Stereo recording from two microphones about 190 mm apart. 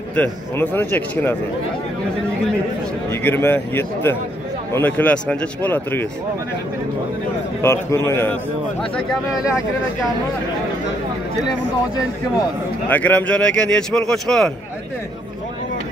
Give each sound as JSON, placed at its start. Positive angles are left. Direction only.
{"t": 0.1, "sound": "speech", "side_deg": 10}
{"t": 3.1, "sound": "speech", "side_deg": 10}
{"t": 7.6, "sound": "speech", "side_deg": 15}
{"t": 12.4, "sound": "a man's voice", "side_deg": 10}